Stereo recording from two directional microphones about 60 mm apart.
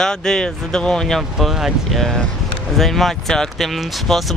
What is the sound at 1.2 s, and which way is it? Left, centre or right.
Speech, centre.